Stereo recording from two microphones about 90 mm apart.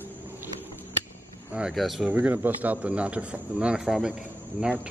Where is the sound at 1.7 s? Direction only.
Centre (ahead or behind).